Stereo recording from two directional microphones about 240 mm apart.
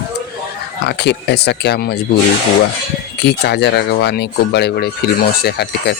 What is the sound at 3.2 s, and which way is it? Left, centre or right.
Speech, left.